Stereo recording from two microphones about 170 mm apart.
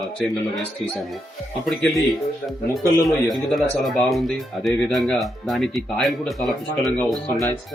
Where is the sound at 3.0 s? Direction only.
Centre (ahead or behind).